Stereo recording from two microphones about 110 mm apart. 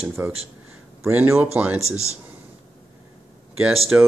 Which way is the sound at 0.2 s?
20° right (ahead or behind).